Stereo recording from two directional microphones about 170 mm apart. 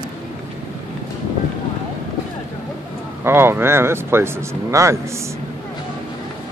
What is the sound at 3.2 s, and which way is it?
Speech, 15° right (ahead or behind).